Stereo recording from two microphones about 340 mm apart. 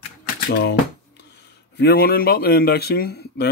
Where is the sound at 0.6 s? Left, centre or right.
Left.